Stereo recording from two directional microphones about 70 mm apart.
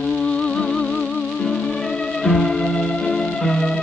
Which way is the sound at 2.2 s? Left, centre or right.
Centre.